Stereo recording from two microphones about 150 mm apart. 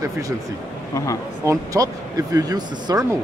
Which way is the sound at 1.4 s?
20° right (ahead or behind).